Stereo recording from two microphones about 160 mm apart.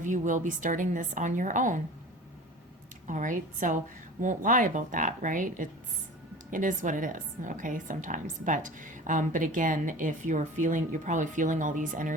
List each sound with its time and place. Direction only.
0.0 s a woman's voice: 50° right (ahead or behind)
3.1 s a woman's voice: 55° right (ahead or behind)